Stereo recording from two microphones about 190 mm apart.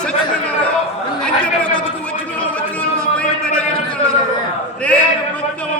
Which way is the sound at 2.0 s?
5° left (ahead or behind).